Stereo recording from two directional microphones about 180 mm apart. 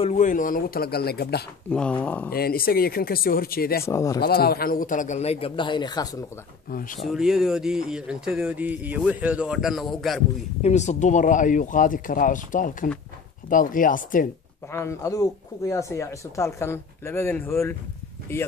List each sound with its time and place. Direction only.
0.0 s speech: 40° left (ahead or behind); by 1.4 s 60° left (ahead or behind)
1.7 s speech: 5° left (ahead or behind)
2.3 s speech: 55° left (ahead or behind)
3.8 s speech: 15° left (ahead or behind)
4.2 s speech: 60° left (ahead or behind); by 6.2 s 25° left (ahead or behind)
6.7 s speech: 50° left (ahead or behind)
7.0 s speech: centre (ahead or behind)
10.6 s speech: 40° left (ahead or behind)
14.7 s speech: 15° left (ahead or behind)